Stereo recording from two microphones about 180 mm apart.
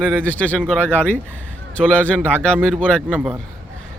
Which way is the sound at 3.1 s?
5° right (ahead or behind).